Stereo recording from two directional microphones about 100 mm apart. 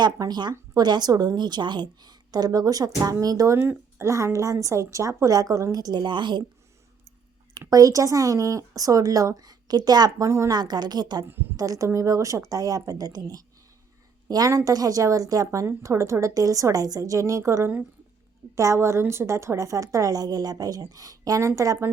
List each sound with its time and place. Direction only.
0.0 s a woman's voice: 45° right (ahead or behind)
7.6 s a woman's voice: 35° right (ahead or behind)
10.2 s speech: 25° right (ahead or behind)
10.5 s a woman's voice: 45° right (ahead or behind)